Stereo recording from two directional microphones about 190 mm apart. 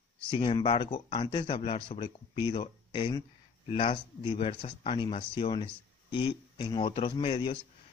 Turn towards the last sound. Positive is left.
turn(degrees=30)  # may be behind; listen again after turning